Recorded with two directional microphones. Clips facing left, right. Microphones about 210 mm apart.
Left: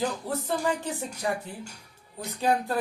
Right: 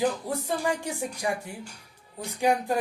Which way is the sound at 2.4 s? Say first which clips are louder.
Right 2 dB; 15° right (ahead or behind).